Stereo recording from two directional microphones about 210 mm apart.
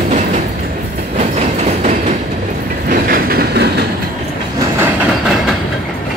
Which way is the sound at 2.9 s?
45° right (ahead or behind).